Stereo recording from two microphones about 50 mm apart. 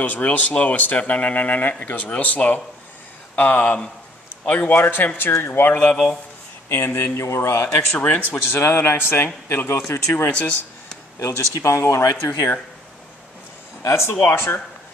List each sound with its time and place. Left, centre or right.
0.0 s speech: left
7.2 s speech: left
8.0 s speech: left
8.5 s speech: left
9.8 s speech: left
11.1 s speech: left
11.6 s speech: left
12.3 s speech: left
13.8 s speech: left
14.2 s speech: left